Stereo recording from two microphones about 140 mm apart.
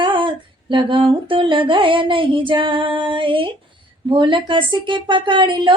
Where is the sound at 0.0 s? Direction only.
35° right (ahead or behind).